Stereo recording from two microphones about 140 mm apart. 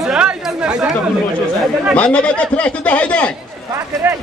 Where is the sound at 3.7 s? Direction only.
20° right (ahead or behind).